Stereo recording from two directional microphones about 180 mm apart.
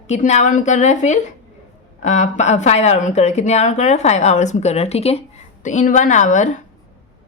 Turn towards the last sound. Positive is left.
turn(degrees=45)  # may be behind; listen again after turning